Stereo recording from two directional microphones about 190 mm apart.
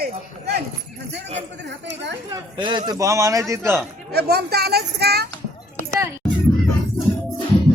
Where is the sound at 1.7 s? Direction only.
65° right (ahead or behind).